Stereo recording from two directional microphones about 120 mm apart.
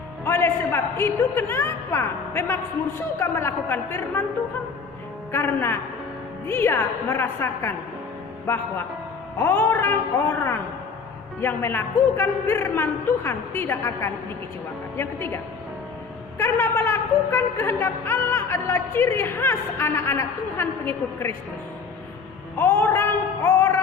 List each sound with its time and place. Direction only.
0.3 s a woman's voice: 20° left (ahead or behind)
5.3 s a woman's voice: 15° left (ahead or behind)
9.4 s a woman's voice: 20° left (ahead or behind)
16.4 s a woman's voice: 20° left (ahead or behind)
22.5 s a sound: 20° left (ahead or behind)